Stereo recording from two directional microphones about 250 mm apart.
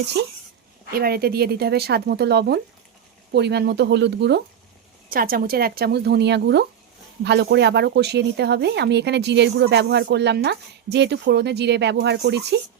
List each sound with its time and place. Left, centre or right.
0.1 s speech: right